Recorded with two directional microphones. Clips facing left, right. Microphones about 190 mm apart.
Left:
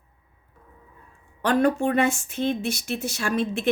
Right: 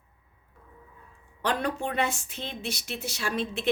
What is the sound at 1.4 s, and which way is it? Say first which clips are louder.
A woman's voice: left 8 dB; 50° left (ahead or behind).